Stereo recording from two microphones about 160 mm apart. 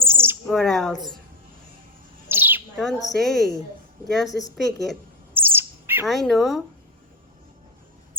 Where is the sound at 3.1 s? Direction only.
Centre (ahead or behind).